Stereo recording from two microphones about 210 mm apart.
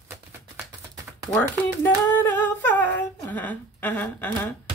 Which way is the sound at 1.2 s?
5° left (ahead or behind).